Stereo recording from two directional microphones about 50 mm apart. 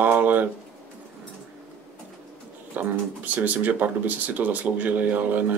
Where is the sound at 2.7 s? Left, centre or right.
Right.